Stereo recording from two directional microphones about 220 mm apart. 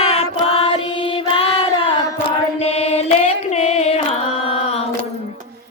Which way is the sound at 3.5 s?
30° left (ahead or behind).